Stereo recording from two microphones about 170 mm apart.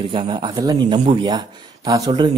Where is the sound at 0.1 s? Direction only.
25° right (ahead or behind).